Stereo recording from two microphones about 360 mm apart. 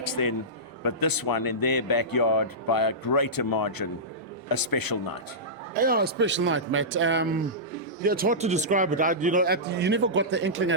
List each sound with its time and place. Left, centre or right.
0.0 s a man's voice: left
5.7 s a man's voice: right